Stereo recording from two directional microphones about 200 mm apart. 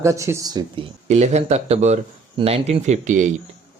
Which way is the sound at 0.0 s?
15° right (ahead or behind).